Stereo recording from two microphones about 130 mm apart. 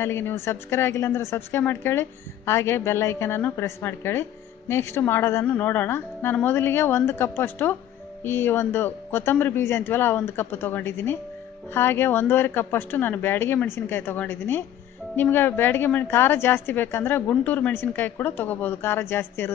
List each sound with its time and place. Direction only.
0.0 s a woman's voice: 20° left (ahead or behind)